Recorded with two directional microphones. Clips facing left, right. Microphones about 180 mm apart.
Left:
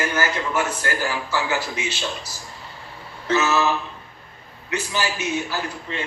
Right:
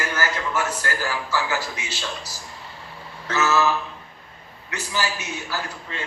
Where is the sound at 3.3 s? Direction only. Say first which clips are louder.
Left 1 dB; 20° left (ahead or behind).